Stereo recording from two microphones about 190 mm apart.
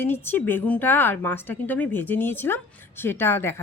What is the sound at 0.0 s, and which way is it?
A woman's voice, 10° left (ahead or behind).